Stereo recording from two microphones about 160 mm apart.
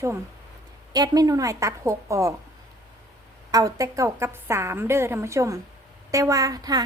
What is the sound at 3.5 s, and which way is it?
A woman's voice, 20° right (ahead or behind).